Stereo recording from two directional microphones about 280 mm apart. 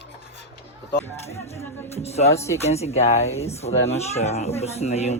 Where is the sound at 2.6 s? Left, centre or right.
Left.